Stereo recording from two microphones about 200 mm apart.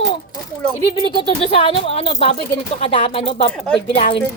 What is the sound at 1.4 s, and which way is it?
Speech, 30° left (ahead or behind).